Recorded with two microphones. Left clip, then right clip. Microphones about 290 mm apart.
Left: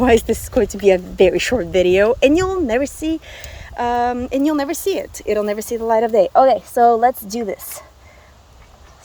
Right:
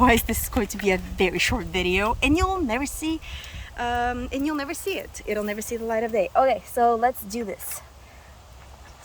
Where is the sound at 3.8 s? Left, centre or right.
Centre.